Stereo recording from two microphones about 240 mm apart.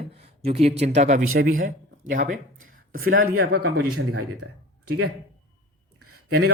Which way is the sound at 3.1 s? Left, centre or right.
Right.